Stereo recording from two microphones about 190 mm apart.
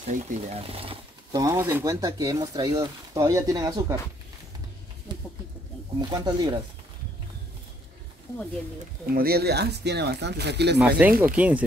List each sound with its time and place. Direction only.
0.1 s speech: 35° right (ahead or behind)
1.3 s speech: 15° right (ahead or behind)
5.9 s speech: 20° right (ahead or behind)
9.1 s speech: 55° right (ahead or behind)
10.8 s speech: 5° right (ahead or behind)